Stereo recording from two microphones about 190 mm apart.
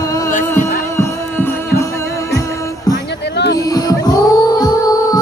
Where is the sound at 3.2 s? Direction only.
65° left (ahead or behind).